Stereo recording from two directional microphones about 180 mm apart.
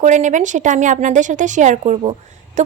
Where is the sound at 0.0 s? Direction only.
45° right (ahead or behind).